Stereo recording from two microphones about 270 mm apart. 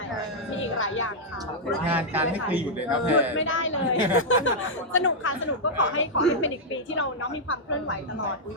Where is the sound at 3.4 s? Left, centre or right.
Left.